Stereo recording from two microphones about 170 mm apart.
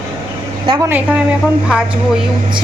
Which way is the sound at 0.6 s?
30° right (ahead or behind).